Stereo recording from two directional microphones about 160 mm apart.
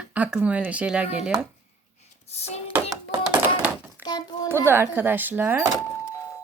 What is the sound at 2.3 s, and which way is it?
Dishes, 40° left (ahead or behind).